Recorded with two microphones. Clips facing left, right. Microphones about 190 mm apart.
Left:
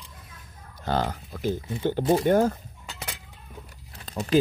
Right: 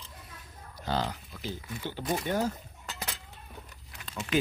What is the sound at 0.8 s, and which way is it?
Speech, 55° left (ahead or behind).